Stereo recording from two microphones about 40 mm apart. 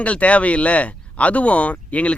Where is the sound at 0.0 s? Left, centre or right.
Left.